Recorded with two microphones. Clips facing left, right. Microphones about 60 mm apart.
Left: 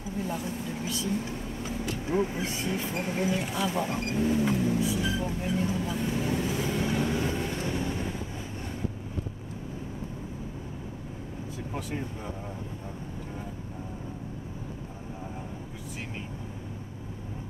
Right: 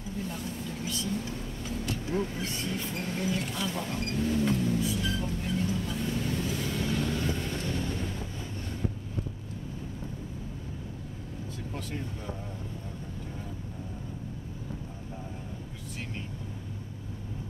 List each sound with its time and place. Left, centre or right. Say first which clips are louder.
2.1 s speech: left 5 dB; centre
2.4 s vehicle: left 3 dB; centre
11.7 s speech: left 4 dB; centre